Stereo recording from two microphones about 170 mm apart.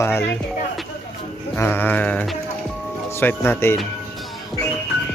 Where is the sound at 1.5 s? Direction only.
10° left (ahead or behind).